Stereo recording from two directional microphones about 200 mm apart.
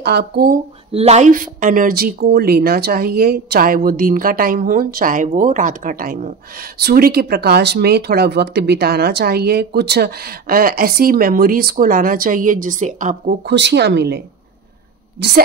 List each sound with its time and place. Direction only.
0.0 s speech: 50° right (ahead or behind)
0.9 s speech: 35° right (ahead or behind)
13.5 s speech: 60° right (ahead or behind)